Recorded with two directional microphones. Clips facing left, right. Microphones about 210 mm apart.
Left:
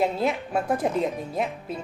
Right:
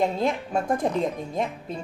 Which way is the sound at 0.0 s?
5° left (ahead or behind).